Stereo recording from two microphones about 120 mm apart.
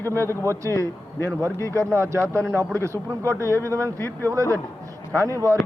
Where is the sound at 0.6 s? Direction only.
20° left (ahead or behind).